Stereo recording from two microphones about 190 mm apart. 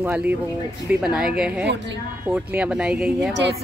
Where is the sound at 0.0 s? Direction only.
10° right (ahead or behind).